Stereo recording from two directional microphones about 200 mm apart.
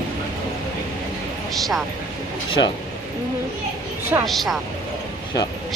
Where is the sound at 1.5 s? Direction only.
Centre (ahead or behind).